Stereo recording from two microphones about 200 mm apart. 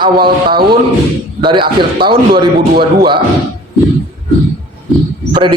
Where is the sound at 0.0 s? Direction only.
25° right (ahead or behind).